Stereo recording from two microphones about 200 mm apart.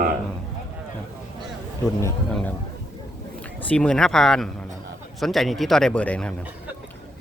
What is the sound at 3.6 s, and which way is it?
Speech, 5° left (ahead or behind).